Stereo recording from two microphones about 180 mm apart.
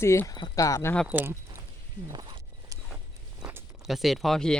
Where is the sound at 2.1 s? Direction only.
20° right (ahead or behind).